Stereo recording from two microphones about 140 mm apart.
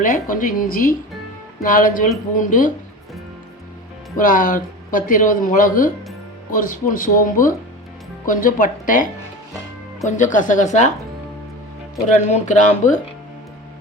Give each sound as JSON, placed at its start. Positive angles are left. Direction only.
{"t": 0.0, "sound": "speech", "side_deg": 75}
{"t": 4.2, "sound": "speech", "side_deg": 75}
{"t": 10.1, "sound": "a woman's voice", "side_deg": 65}
{"t": 12.1, "sound": "a woman's voice", "side_deg": 60}